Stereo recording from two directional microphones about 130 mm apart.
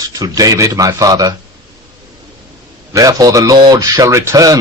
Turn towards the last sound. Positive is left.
turn(degrees=-25)  # may be behind; listen again after turning